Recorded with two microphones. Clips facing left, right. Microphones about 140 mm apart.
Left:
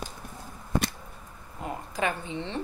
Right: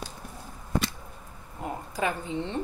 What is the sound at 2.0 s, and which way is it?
Speech, 40° right (ahead or behind).